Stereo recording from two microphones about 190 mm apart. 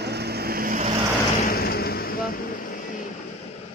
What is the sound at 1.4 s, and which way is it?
Speech, 55° left (ahead or behind).